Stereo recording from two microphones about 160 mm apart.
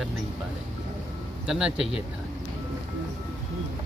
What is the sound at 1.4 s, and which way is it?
Speech, 5° right (ahead or behind).